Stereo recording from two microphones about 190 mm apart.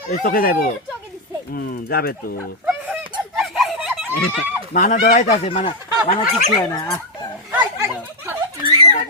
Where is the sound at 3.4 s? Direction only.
Centre (ahead or behind).